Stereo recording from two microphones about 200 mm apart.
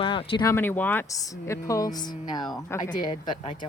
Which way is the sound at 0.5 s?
10° left (ahead or behind).